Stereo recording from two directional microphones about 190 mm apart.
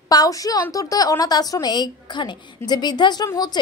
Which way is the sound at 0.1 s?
20° left (ahead or behind).